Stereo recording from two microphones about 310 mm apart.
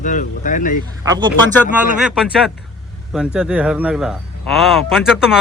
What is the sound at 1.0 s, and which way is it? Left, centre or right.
A man's voice, centre.